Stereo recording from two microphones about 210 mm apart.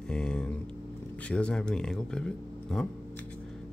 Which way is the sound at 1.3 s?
5° left (ahead or behind).